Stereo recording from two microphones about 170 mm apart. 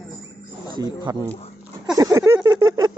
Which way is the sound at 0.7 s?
25° right (ahead or behind).